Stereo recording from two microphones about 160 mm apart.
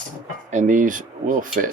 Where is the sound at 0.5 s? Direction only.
55° right (ahead or behind).